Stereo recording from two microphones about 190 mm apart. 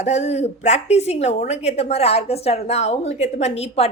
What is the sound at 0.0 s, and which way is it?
A woman's voice, 35° left (ahead or behind).